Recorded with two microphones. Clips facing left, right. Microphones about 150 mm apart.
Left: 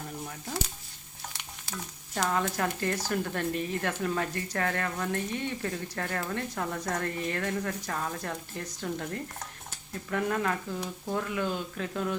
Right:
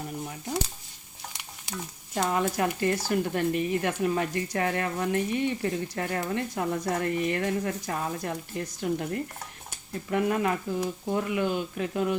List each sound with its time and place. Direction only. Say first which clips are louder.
0.3 s speech: right 6 dB; 20° right (ahead or behind)
2.6 s speech: right 4 dB; 15° right (ahead or behind)
10.1 s speech: right 4 dB; 15° right (ahead or behind)